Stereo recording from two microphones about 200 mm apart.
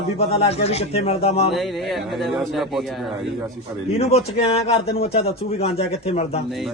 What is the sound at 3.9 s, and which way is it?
Speech, 30° left (ahead or behind).